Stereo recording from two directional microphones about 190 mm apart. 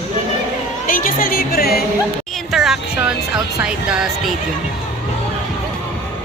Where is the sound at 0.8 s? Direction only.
45° left (ahead or behind).